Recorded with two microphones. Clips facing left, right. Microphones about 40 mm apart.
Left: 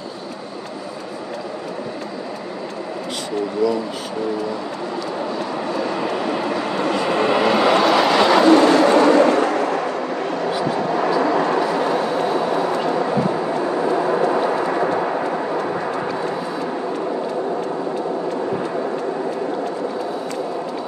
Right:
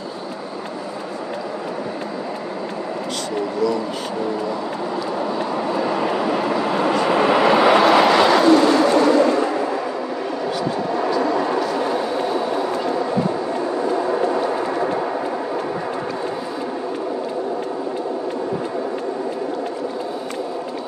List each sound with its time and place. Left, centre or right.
5.5 s vehicle: centre
8.4 s vehicle: centre
9.0 s a sound: left
11.1 s a sound: left
11.7 s vehicle: left
12.5 s vehicle: left
13.8 s vehicle: left